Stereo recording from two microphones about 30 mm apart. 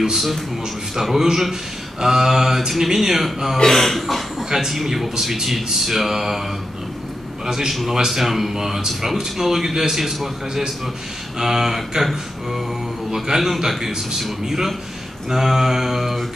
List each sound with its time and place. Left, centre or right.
1.1 s speech: centre
3.6 s speech: centre
4.5 s speech: centre
7.4 s speech: centre
8.1 s speech: centre